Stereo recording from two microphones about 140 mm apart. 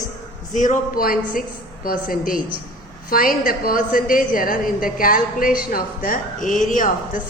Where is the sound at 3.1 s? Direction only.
90° left.